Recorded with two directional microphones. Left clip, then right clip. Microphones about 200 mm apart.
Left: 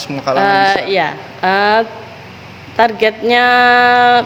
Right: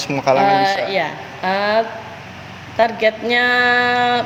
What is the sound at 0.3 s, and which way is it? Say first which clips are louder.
Speech: left 6 dB; 50° left (ahead or behind).